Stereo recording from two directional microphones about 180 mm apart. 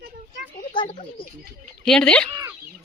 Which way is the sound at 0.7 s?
30° left (ahead or behind).